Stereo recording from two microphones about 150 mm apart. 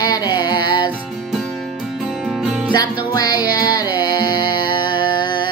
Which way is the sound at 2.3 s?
5° right (ahead or behind).